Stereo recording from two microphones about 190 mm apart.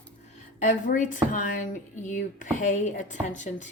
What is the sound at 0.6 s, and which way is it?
A woman's voice, 40° left (ahead or behind).